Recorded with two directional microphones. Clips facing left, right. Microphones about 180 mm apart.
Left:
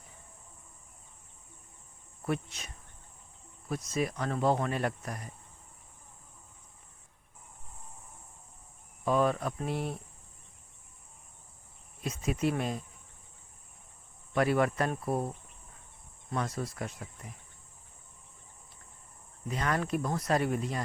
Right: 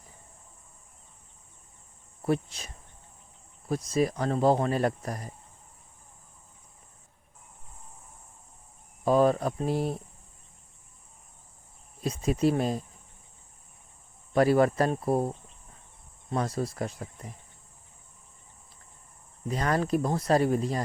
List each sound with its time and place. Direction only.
2.2 s speech: 35° right (ahead or behind)
9.0 s speech: 35° right (ahead or behind)
12.0 s speech: 35° right (ahead or behind)
14.3 s speech: 35° right (ahead or behind)
19.5 s speech: 35° right (ahead or behind)